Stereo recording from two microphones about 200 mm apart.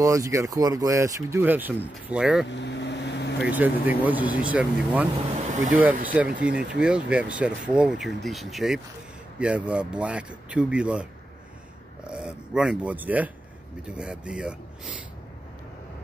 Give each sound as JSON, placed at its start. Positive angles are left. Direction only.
{"t": 0.0, "sound": "speech", "side_deg": -15}
{"t": 2.5, "sound": "vehicle", "side_deg": 60}
{"t": 3.3, "sound": "speech", "side_deg": -10}
{"t": 12.1, "sound": "speech", "side_deg": -5}